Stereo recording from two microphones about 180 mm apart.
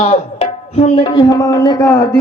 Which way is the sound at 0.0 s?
35° left (ahead or behind).